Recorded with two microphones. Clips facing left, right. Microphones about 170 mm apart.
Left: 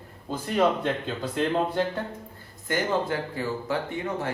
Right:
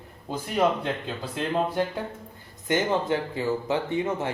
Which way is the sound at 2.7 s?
20° right (ahead or behind).